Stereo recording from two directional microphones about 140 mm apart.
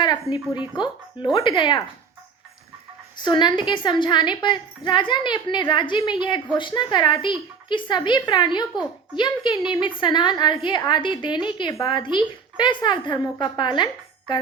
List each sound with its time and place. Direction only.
0.0 s a sound: 30° left (ahead or behind)
0.8 s a woman's voice: 35° left (ahead or behind)
3.2 s a woman's voice: 35° left (ahead or behind)